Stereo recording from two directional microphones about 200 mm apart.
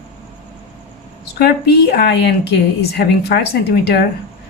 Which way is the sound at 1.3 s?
55° left (ahead or behind).